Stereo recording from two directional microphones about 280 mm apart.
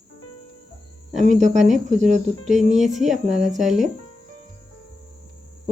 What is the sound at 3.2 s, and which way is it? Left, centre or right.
Speech, right.